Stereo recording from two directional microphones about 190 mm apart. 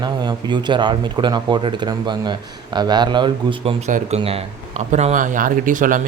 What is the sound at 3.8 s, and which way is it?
Speech, 35° right (ahead or behind).